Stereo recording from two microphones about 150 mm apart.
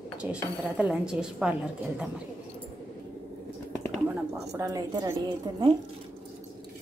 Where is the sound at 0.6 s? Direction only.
5° right (ahead or behind).